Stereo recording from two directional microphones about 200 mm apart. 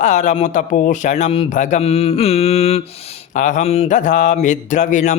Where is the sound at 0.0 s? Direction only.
35° left (ahead or behind).